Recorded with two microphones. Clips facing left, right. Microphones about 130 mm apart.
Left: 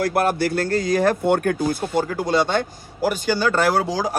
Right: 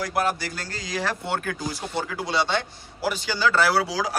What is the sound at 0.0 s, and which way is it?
Speech, 55° left (ahead or behind).